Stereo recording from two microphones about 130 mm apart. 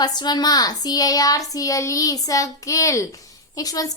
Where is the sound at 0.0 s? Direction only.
30° left (ahead or behind).